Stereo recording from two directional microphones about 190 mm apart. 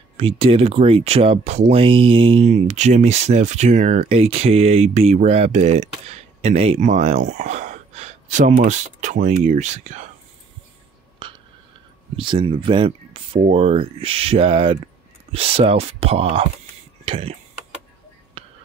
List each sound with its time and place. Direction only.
0.2 s speech: 30° right (ahead or behind)
11.2 s a sound: 25° right (ahead or behind)
12.2 s speech: 25° right (ahead or behind)
18.4 s whispering: 30° right (ahead or behind)